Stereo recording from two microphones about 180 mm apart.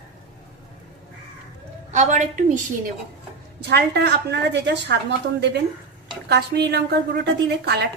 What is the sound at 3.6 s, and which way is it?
A woman's voice, 65° right (ahead or behind).